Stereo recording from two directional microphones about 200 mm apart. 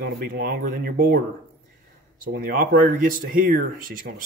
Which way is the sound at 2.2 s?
45° right (ahead or behind).